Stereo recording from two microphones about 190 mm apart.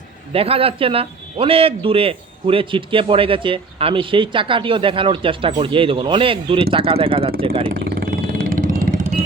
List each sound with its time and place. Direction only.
0.3 s a man's voice: 30° right (ahead or behind)
7.7 s vehicle: 55° right (ahead or behind)